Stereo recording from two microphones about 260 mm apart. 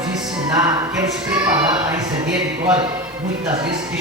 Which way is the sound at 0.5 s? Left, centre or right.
Centre.